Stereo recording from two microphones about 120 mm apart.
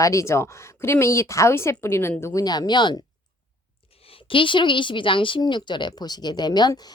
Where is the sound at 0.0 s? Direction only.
25° left (ahead or behind).